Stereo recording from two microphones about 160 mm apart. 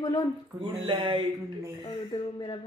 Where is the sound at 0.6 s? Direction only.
30° right (ahead or behind).